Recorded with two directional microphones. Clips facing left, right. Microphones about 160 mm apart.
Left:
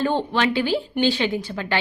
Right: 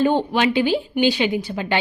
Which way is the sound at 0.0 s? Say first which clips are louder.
Right 3 dB; 15° right (ahead or behind).